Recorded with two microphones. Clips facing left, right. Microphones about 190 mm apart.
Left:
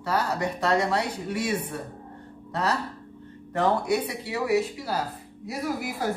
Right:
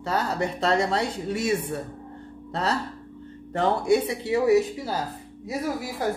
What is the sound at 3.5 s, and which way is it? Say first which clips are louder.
Speech: right 2 dB; 25° right (ahead or behind).